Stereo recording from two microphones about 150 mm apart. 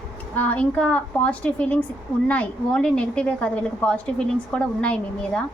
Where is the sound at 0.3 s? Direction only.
10° left (ahead or behind).